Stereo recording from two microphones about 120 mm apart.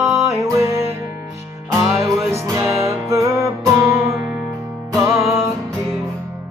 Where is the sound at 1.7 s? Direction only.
25° right (ahead or behind).